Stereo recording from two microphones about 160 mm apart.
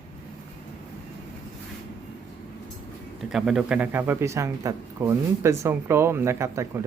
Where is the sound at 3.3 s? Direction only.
5° right (ahead or behind).